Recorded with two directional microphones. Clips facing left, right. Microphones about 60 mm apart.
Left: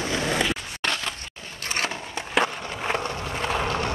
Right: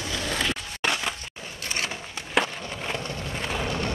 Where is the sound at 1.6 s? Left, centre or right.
Left.